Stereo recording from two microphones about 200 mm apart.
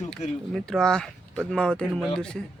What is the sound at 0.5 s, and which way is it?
A man's voice, 5° left (ahead or behind).